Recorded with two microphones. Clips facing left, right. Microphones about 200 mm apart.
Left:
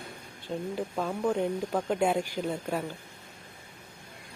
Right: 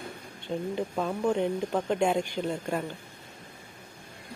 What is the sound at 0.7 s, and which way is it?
Speech, 5° left (ahead or behind).